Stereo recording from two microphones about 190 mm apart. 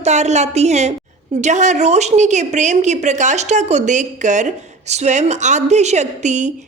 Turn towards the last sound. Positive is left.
turn(degrees=-40)  # may be behind; listen again after turning